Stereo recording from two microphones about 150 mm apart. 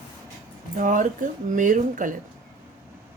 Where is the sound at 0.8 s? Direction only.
60° right (ahead or behind).